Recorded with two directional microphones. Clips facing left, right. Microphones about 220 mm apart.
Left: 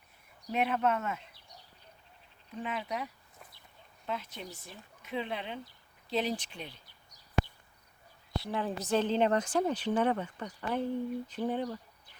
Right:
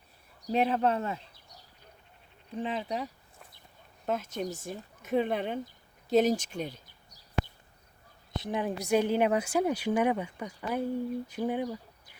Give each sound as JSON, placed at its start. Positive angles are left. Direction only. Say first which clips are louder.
{"t": 0.4, "sound": "speech", "louder": "right 3 dB", "side_deg": -35}
{"t": 2.6, "sound": "speech", "louder": "right 4 dB", "side_deg": -30}
{"t": 4.0, "sound": "speech", "louder": "right 7 dB", "side_deg": -45}
{"t": 8.3, "sound": "a woman's voice", "louder": "right 2 dB", "side_deg": -20}